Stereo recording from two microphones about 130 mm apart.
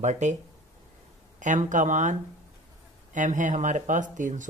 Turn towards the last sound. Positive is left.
turn(degrees=-75)  # may be behind; listen again after turning